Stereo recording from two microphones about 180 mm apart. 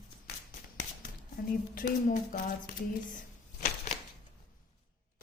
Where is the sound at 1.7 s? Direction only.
50° left (ahead or behind).